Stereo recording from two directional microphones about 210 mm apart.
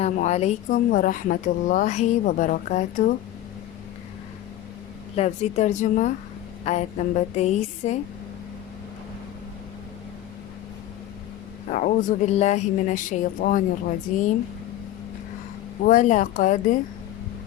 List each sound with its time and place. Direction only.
0.0 s speech: 30° left (ahead or behind)
5.1 s speech: 30° left (ahead or behind)
11.7 s speech: 40° left (ahead or behind)
15.8 s speech: 35° left (ahead or behind)